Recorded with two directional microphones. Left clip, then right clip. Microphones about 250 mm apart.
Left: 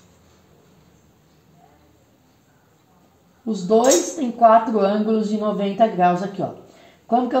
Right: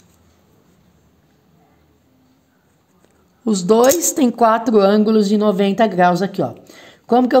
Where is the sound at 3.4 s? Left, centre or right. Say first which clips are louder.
Right 4 dB; right.